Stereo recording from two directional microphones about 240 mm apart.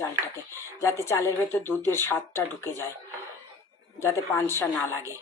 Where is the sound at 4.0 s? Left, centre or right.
Centre.